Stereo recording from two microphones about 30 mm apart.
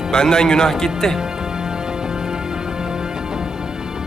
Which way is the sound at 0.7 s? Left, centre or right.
Centre.